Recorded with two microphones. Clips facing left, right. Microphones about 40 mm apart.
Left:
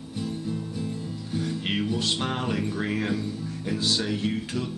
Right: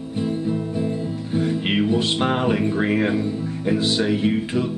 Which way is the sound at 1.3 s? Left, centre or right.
Right.